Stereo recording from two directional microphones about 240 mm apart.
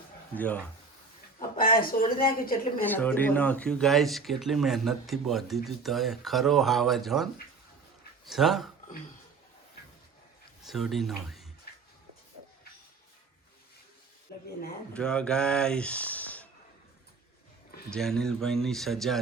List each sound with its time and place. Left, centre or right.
0.3 s speech: centre
1.4 s speech: left
2.9 s speech: centre
8.3 s speech: centre
10.7 s speech: centre
11.7 s a sound: left
14.3 s a sound: left
14.9 s speech: centre
17.7 s a sound: left
17.9 s speech: centre